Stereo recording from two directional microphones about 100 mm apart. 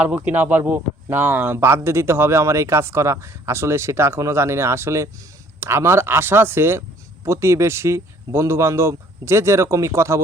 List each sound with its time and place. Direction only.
0.2 s speech: 15° right (ahead or behind)